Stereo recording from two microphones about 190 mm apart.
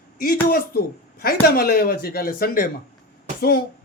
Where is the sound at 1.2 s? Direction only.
50° left (ahead or behind).